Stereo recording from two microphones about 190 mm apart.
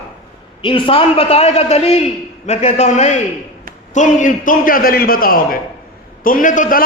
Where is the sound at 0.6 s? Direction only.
25° left (ahead or behind).